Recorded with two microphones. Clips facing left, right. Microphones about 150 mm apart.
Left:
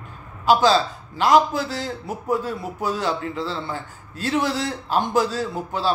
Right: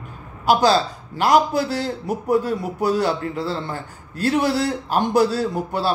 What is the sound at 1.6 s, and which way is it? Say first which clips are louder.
Speech: right 4 dB; 40° right (ahead or behind).